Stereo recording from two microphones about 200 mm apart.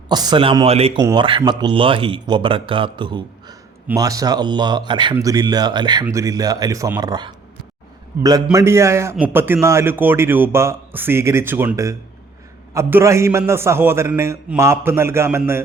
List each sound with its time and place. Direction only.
0.1 s a man's voice: 20° right (ahead or behind)